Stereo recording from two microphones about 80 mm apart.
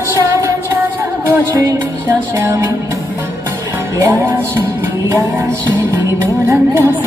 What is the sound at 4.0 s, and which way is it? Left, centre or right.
Music, right.